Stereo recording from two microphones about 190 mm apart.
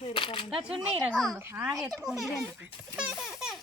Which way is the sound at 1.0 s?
Centre (ahead or behind).